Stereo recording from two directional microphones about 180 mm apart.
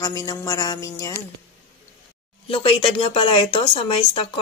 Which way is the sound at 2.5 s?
30° left (ahead or behind).